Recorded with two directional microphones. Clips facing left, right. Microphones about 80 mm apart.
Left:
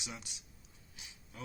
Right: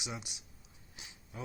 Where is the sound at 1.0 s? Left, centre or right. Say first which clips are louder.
Right 4 dB; right.